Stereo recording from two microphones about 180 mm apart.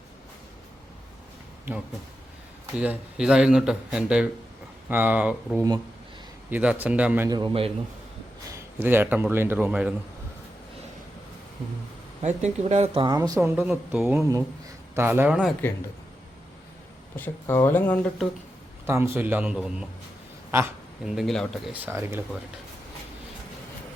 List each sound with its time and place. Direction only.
2.7 s speech: 5° right (ahead or behind)
7.3 s speech: 25° right (ahead or behind)
8.4 s speech: 15° right (ahead or behind)
12.2 s speech: 40° right (ahead or behind); by 15.5 s 5° right (ahead or behind)
17.2 s speech: 10° left (ahead or behind)
18.9 s speech: 15° right (ahead or behind)
21.0 s speech: centre (ahead or behind)
21.8 s speech: 15° right (ahead or behind)